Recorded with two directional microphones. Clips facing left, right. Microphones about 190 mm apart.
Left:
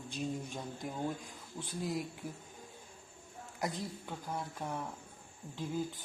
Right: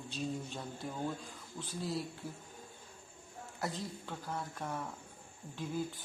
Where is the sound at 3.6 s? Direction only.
15° left (ahead or behind).